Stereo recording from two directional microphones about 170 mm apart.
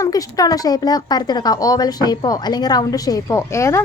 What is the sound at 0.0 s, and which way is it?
A woman's voice, 20° left (ahead or behind).